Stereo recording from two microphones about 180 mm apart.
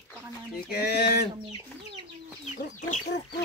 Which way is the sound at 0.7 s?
65° left (ahead or behind).